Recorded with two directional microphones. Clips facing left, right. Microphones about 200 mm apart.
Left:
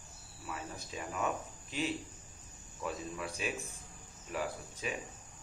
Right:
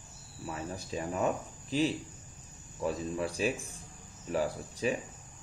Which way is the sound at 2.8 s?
35° right (ahead or behind).